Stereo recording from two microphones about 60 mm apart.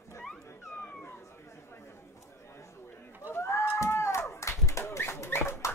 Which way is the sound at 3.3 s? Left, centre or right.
Left.